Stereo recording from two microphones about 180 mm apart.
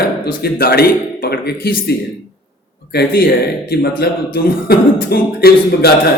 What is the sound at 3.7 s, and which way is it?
A man's voice, 60° left (ahead or behind).